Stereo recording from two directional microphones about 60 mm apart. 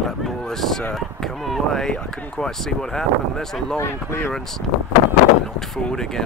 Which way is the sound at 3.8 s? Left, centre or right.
Left.